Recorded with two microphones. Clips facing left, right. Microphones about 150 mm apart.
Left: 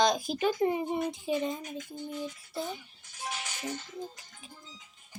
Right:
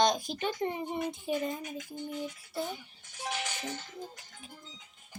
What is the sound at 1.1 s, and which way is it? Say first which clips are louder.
Speech: left 2 dB; centre (ahead or behind).